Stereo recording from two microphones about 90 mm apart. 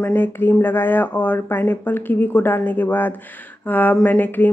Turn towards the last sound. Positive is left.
turn(degrees=20)  # may be behind; listen again after turning